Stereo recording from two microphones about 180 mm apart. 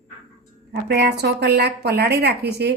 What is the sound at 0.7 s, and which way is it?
A woman's voice, 65° right (ahead or behind).